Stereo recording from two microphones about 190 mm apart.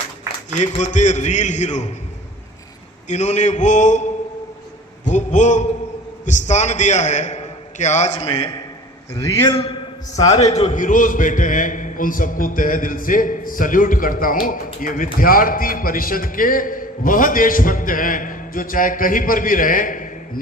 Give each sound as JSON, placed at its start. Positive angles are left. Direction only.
{"t": 0.5, "sound": "a man's voice", "side_deg": 40}
{"t": 3.1, "sound": "a man's voice", "side_deg": 40}
{"t": 8.3, "sound": "a man's voice", "side_deg": 20}
{"t": 9.5, "sound": "a man's voice", "side_deg": 25}
{"t": 10.4, "sound": "a man's voice", "side_deg": 35}